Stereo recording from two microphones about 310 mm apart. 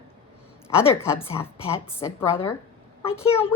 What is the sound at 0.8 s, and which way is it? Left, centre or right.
A woman's voice, centre.